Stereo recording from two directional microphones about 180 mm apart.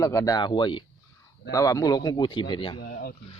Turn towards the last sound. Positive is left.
turn(degrees=60)  # may be behind; listen again after turning